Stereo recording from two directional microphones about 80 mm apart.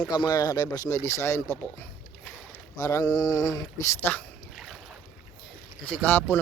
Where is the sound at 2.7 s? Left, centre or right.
Left.